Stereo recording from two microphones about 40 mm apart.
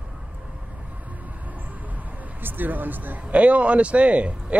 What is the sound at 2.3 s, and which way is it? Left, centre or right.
Speech, right.